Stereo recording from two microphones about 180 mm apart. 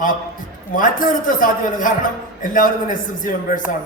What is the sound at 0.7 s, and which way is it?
A man's voice, 50° left (ahead or behind).